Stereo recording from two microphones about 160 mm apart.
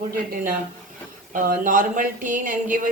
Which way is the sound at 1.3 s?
55° right (ahead or behind).